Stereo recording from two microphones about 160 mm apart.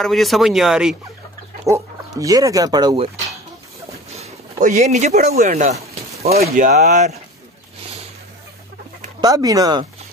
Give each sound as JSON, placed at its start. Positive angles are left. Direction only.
{"t": 0.0, "sound": "speech", "side_deg": 0}
{"t": 1.7, "sound": "speech", "side_deg": -20}
{"t": 4.1, "sound": "a sound", "side_deg": -45}
{"t": 5.3, "sound": "speech", "side_deg": -55}
{"t": 9.2, "sound": "speech", "side_deg": -25}